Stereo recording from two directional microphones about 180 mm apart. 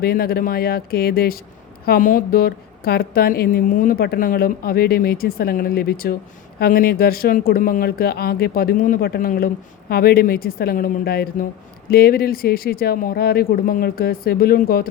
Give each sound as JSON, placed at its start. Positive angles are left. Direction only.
{"t": 0.0, "sound": "a woman's voice", "side_deg": 60}